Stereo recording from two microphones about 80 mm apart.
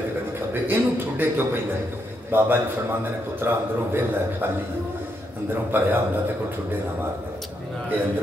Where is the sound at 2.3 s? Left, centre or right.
Right.